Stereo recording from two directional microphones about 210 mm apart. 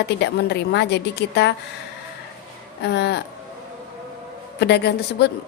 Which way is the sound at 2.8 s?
55° left (ahead or behind).